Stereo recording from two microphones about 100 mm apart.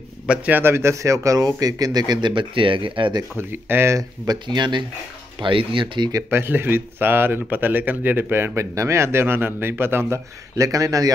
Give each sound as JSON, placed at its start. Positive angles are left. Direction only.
{"t": 0.3, "sound": "speech", "side_deg": -20}
{"t": 3.3, "sound": "a man's voice", "side_deg": -25}
{"t": 4.3, "sound": "speech", "side_deg": -50}
{"t": 5.4, "sound": "speech", "side_deg": -60}
{"t": 6.3, "sound": "a man's voice", "side_deg": -20}